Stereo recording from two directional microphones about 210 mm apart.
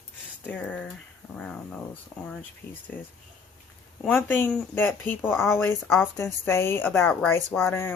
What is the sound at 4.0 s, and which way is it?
A woman's voice, 10° left (ahead or behind).